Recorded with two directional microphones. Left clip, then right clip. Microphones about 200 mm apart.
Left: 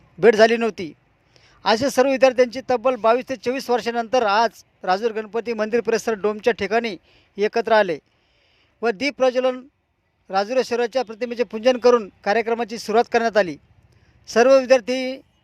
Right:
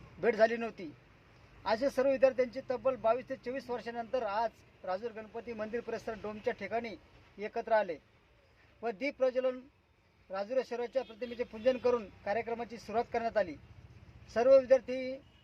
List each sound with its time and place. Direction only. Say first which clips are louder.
0.2 s speech: left 15 dB; 40° left (ahead or behind)